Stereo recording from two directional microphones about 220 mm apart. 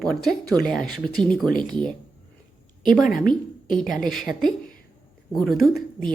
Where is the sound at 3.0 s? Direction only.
40° left (ahead or behind).